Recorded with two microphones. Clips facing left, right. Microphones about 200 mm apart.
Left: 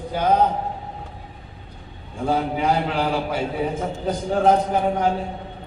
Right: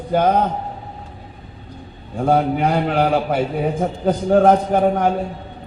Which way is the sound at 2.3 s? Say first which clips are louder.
Right 4 dB; 55° right (ahead or behind).